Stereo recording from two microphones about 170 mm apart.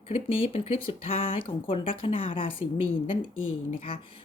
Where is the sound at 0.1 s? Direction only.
35° left (ahead or behind).